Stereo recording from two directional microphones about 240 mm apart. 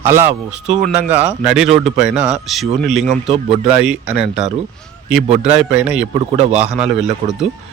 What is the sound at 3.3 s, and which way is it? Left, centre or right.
Speech, right.